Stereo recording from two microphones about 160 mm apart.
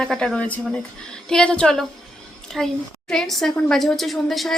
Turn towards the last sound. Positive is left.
turn(degrees=0)  # may be behind; listen again after turning